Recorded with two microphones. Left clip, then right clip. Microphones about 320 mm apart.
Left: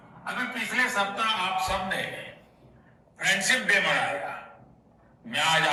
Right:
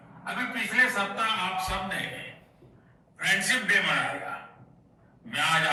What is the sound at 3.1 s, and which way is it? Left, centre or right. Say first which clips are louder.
Speech: left 1 dB; centre.